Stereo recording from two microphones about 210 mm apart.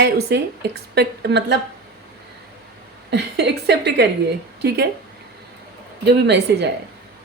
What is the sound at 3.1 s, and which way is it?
A woman's voice, 55° right (ahead or behind).